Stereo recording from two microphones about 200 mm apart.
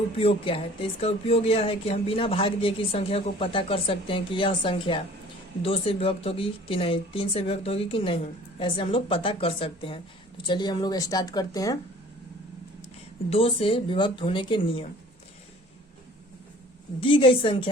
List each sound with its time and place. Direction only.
0.2 s speech: 30° left (ahead or behind)
13.3 s speech: 30° left (ahead or behind)
17.0 s speech: 25° left (ahead or behind)